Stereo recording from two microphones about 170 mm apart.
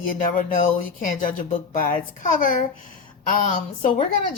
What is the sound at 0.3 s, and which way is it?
Speech, 50° left (ahead or behind).